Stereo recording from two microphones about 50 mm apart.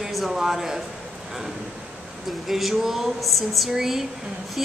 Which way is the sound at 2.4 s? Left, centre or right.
Centre.